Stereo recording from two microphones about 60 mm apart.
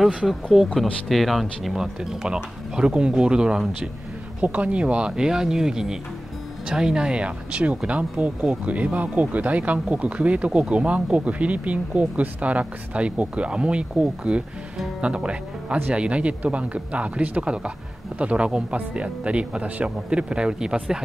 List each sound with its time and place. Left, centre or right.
0.3 s speech: centre
4.4 s speech: right